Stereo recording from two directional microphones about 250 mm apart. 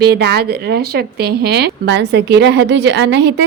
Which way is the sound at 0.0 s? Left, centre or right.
Right.